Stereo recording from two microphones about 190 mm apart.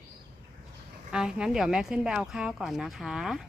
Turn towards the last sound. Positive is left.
turn(degrees=-5)  # may be behind; listen again after turning